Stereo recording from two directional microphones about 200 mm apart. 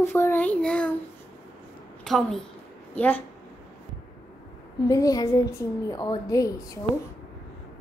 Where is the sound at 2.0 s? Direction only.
Centre (ahead or behind).